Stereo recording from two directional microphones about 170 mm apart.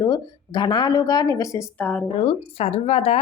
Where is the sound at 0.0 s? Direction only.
25° left (ahead or behind).